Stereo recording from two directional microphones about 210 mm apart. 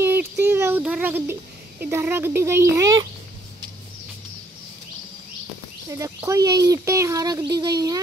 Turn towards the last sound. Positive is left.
turn(degrees=-20)  # may be behind; listen again after turning